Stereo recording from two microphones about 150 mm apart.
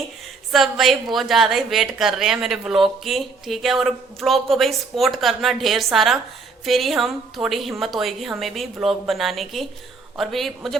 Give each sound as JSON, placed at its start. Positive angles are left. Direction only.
{"t": 0.5, "sound": "speech", "side_deg": 0}